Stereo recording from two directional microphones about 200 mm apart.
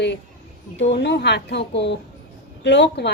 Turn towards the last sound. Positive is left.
turn(degrees=60)  # may be behind; listen again after turning